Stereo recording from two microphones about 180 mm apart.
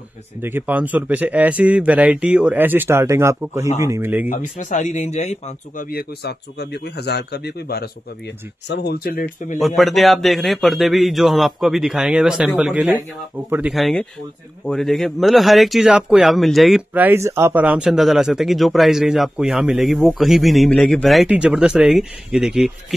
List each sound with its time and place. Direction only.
0.4 s speech: 10° right (ahead or behind)
4.3 s speech: 40° left (ahead or behind)
5.9 s speech: 60° left (ahead or behind)
9.6 s speech: centre (ahead or behind)